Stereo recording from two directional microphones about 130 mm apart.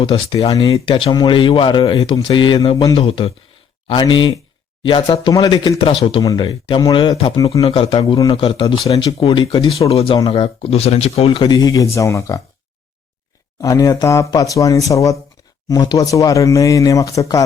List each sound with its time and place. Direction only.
0.0 s speech: 40° left (ahead or behind)
5.1 s speech: 30° left (ahead or behind)
5.8 s speech: 45° left (ahead or behind); by 7.6 s 30° left (ahead or behind)
7.6 s speech: 50° left (ahead or behind); by 12.4 s 25° left (ahead or behind)
13.6 s speech: 25° left (ahead or behind)